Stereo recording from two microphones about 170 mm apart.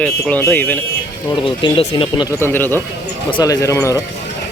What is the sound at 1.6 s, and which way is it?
Speech, 30° left (ahead or behind).